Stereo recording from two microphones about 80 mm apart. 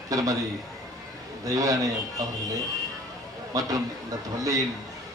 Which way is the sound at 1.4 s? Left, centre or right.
Right.